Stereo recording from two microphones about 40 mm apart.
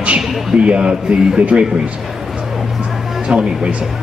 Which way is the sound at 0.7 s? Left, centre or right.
Right.